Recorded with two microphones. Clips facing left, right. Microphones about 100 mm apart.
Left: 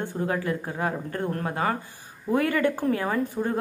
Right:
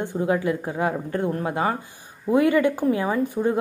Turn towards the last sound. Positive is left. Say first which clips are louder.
# right 4 dB
turn(degrees=-15)  # may be behind; listen again after turning